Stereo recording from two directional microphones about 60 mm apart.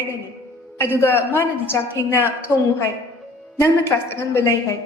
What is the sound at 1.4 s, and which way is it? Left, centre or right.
Speech, left.